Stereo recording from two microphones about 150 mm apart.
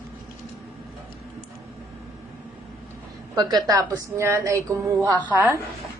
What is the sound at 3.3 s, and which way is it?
A woman's voice, 25° right (ahead or behind).